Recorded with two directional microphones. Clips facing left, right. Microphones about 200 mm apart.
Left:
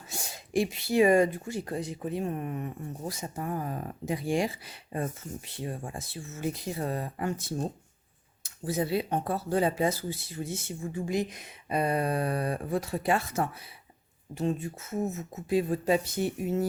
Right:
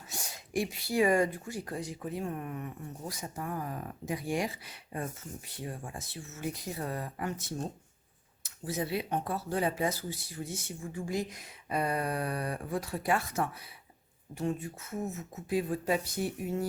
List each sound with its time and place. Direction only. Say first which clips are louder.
0.1 s speech: left 5 dB; 25° left (ahead or behind)